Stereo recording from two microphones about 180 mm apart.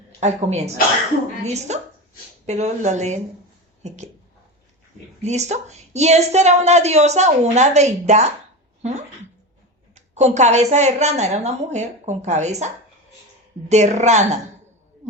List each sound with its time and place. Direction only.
0.2 s a woman's voice: 40° right (ahead or behind)
1.7 s a woman's voice: 40° right (ahead or behind)
5.2 s a woman's voice: 40° right (ahead or behind)
8.8 s a sound: 40° right (ahead or behind)
9.9 s a woman's voice: 40° right (ahead or behind)